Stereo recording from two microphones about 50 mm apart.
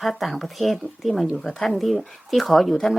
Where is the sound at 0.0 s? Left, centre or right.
Centre.